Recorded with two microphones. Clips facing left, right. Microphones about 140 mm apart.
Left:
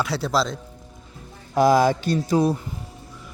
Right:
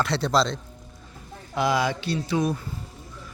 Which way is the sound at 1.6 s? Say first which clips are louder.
Left 7 dB; 40° left (ahead or behind).